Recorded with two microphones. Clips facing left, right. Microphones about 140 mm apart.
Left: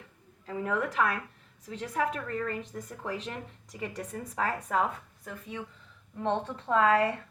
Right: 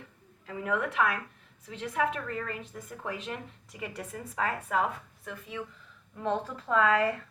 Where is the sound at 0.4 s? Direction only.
35° left (ahead or behind).